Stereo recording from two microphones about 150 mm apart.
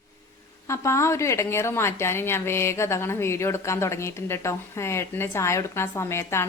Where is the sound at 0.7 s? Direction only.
20° left (ahead or behind).